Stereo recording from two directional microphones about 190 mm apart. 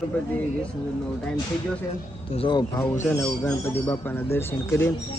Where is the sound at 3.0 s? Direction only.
10° left (ahead or behind).